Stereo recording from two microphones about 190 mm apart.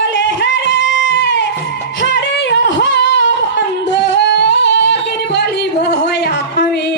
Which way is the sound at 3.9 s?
65° left (ahead or behind).